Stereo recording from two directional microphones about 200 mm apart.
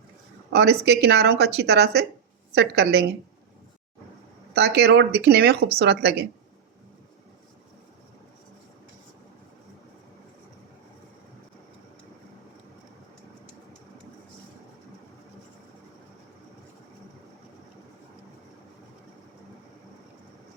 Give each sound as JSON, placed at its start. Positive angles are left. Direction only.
{"t": 0.5, "sound": "speech", "side_deg": -55}
{"t": 4.5, "sound": "speech", "side_deg": -55}